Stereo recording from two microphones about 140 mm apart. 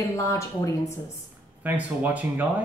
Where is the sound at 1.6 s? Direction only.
10° right (ahead or behind).